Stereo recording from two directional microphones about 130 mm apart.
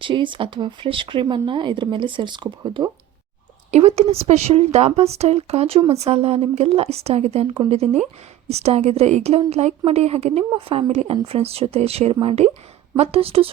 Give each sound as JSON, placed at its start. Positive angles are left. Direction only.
{"t": 0.0, "sound": "speech", "side_deg": -40}
{"t": 3.7, "sound": "speech", "side_deg": -55}